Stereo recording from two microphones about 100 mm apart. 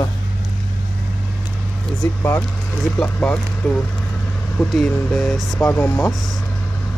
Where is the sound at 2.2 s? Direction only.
20° left (ahead or behind).